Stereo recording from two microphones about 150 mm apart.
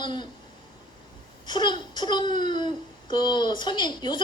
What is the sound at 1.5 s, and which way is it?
A woman's voice, 30° left (ahead or behind).